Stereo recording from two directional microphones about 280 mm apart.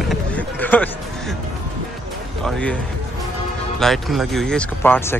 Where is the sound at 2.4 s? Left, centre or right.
Centre.